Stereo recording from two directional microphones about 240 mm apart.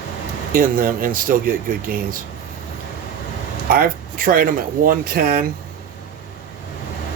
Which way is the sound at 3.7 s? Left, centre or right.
Right.